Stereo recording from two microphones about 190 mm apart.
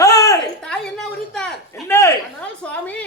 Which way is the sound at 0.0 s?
15° left (ahead or behind).